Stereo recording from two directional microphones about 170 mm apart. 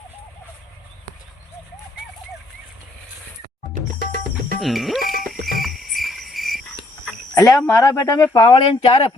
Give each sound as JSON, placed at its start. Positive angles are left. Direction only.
{"t": 4.6, "sound": "cricket", "side_deg": 0}
{"t": 7.3, "sound": "speech", "side_deg": 20}